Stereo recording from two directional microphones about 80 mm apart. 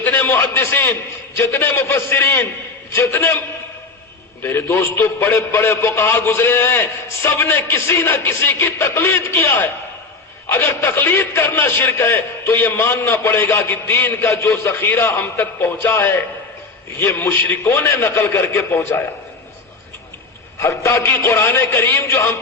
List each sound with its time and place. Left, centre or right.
0.0 s a man's voice: left
4.4 s a man's voice: left
13.7 s a man's voice: left
20.6 s a man's voice: left